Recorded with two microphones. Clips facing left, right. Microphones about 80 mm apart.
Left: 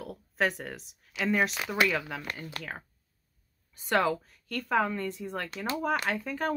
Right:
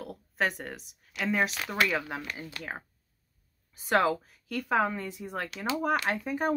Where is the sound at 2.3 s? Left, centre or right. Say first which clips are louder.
Even; left.